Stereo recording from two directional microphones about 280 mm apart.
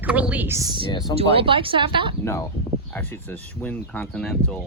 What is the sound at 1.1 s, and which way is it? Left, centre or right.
Speech, centre.